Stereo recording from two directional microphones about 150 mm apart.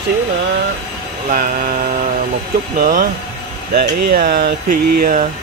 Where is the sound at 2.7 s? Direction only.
85° right.